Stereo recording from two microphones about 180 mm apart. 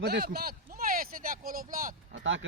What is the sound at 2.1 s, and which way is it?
Speech, 90° right.